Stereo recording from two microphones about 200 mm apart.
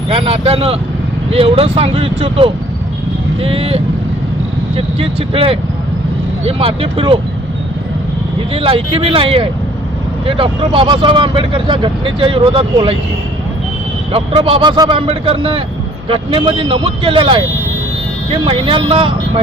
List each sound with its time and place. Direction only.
0.1 s speech: 30° right (ahead or behind)
4.9 s speech: 30° right (ahead or behind)
8.5 s speech: 30° right (ahead or behind)
14.1 s speech: 30° right (ahead or behind)